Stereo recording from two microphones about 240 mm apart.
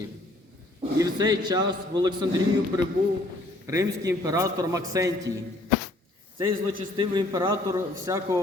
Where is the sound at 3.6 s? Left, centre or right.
Centre.